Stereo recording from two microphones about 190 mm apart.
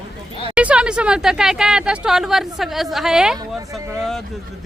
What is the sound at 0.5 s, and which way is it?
Speech, 5° right (ahead or behind).